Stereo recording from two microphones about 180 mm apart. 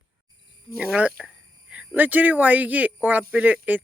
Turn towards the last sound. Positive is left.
turn(degrees=-10)  # may be behind; listen again after turning